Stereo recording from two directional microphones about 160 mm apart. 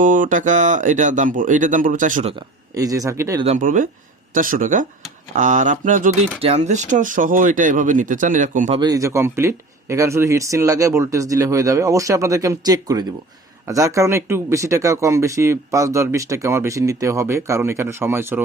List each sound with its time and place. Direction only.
0.0 s speech: 55° right (ahead or behind)
2.7 s speech: 20° right (ahead or behind)
3.4 s speech: 50° right (ahead or behind)
8.8 s speech: 20° right (ahead or behind)